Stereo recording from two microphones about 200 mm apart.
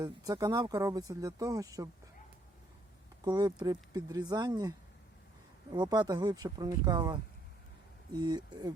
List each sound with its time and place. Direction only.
0.0 s speech: 20° right (ahead or behind)
3.2 s speech: 20° right (ahead or behind)
5.7 s speech: 20° right (ahead or behind)